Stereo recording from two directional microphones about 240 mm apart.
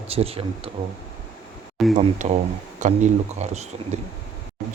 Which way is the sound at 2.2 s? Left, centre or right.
Right.